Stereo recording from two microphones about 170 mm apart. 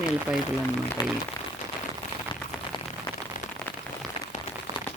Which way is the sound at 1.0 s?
25° left (ahead or behind).